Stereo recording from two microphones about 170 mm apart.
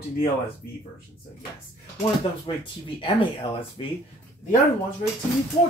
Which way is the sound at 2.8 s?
30° left (ahead or behind).